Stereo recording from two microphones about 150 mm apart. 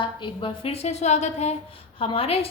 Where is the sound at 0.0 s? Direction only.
35° left (ahead or behind).